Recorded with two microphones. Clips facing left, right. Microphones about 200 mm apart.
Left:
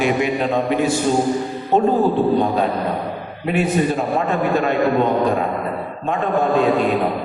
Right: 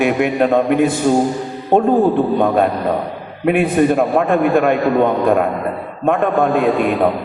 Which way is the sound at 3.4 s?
55° right (ahead or behind).